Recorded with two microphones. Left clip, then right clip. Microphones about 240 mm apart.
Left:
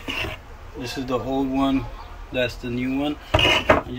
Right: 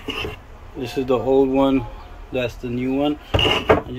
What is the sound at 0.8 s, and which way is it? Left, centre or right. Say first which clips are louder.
Speech: right 5 dB; right.